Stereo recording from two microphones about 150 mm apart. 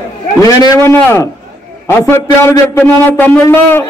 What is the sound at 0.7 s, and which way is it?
A man's voice, 15° left (ahead or behind).